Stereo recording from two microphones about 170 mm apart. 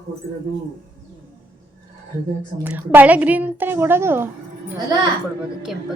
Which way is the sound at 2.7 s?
10° right (ahead or behind).